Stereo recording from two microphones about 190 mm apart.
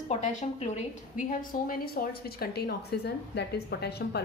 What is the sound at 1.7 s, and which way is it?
Speech, 50° left (ahead or behind).